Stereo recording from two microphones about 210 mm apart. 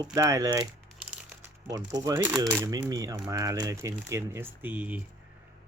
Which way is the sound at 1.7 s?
15° right (ahead or behind).